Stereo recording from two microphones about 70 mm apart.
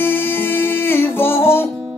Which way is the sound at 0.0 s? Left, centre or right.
Left.